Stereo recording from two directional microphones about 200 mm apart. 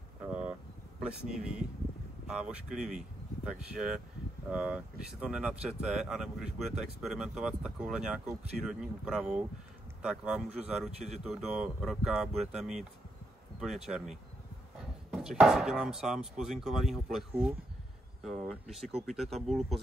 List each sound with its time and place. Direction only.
0.3 s vehicle: 5° right (ahead or behind)
1.0 s speech: 5° right (ahead or behind)
15.0 s speech: 5° right (ahead or behind)